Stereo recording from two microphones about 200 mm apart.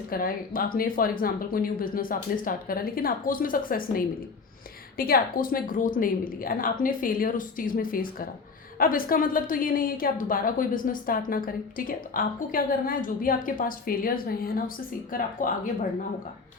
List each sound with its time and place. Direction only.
0.1 s a woman's voice: 45° left (ahead or behind)